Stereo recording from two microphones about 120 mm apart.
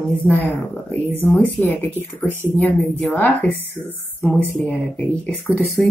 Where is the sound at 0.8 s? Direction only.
15° left (ahead or behind).